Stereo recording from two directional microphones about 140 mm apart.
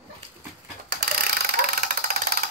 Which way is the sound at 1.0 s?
90° right.